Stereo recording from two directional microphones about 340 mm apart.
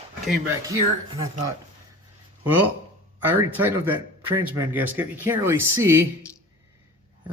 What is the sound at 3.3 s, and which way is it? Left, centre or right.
Speech, centre.